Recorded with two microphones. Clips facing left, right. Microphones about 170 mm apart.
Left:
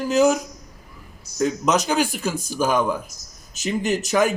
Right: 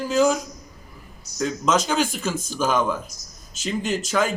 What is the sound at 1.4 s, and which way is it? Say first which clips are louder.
A man's voice: left 2 dB; 15° left (ahead or behind).